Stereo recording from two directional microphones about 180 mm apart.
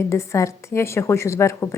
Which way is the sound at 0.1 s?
15° left (ahead or behind).